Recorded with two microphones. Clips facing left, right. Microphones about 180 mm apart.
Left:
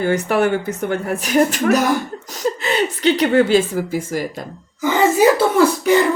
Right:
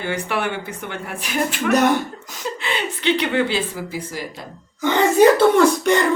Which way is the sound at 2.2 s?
40° left (ahead or behind).